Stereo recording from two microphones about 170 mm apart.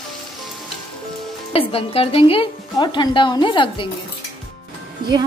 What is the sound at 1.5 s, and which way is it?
Speech, 35° left (ahead or behind).